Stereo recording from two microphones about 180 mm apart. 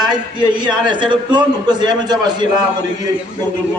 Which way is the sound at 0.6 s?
25° right (ahead or behind).